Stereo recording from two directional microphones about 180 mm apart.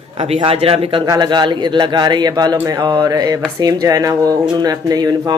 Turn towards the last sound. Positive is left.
turn(degrees=-20)  # may be behind; listen again after turning